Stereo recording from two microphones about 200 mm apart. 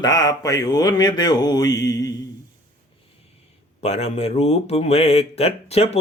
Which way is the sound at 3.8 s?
35° left (ahead or behind).